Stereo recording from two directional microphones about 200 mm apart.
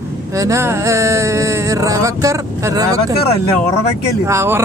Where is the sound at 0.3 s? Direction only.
15° right (ahead or behind).